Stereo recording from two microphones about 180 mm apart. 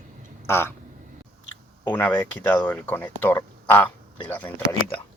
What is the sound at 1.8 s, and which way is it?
Speech, 10° left (ahead or behind).